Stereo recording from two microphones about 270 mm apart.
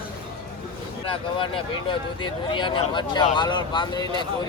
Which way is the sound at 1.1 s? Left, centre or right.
Centre.